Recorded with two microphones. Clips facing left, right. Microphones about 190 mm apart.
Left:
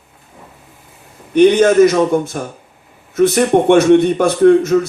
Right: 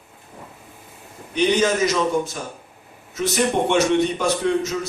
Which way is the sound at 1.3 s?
55° left (ahead or behind).